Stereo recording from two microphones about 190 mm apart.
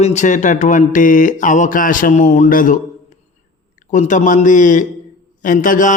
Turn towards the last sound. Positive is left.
turn(degrees=45)  # may be behind; listen again after turning